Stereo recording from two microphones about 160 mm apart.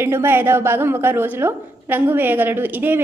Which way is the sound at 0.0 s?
15° right (ahead or behind).